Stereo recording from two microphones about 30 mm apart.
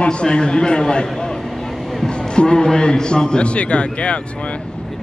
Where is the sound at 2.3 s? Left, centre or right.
Left.